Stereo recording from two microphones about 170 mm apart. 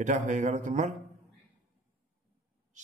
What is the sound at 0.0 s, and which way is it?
Speech, 45° right (ahead or behind).